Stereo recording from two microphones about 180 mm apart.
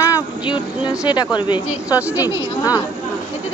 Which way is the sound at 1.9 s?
10° right (ahead or behind).